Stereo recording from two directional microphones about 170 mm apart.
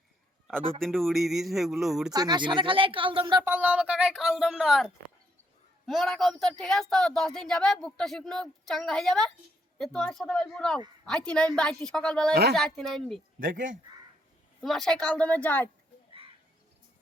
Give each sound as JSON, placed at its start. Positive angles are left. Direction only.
{"t": 0.8, "sound": "speech", "side_deg": 0}
{"t": 2.1, "sound": "speech", "side_deg": -25}
{"t": 3.4, "sound": "speech", "side_deg": -10}
{"t": 12.3, "sound": "speech", "side_deg": -70}
{"t": 12.5, "sound": "speech", "side_deg": 0}
{"t": 13.4, "sound": "speech", "side_deg": -50}
{"t": 14.6, "sound": "a woman's voice", "side_deg": 0}